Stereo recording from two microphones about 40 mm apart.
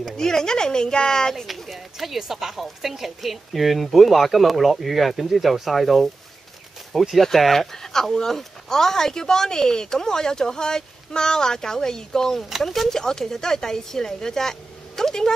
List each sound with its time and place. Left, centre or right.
0.2 s speech: centre
1.4 s speech: centre
12.6 s speech: centre
12.9 s speech: centre